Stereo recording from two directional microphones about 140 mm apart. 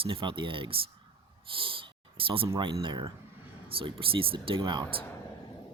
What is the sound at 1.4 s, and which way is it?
Snort, 40° right (ahead or behind).